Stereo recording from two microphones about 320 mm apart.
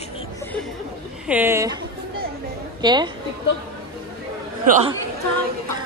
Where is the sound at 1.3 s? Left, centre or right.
Centre.